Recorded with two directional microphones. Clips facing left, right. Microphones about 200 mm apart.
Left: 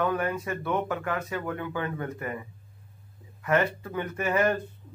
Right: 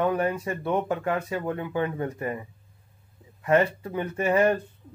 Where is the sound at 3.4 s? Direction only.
30° right (ahead or behind).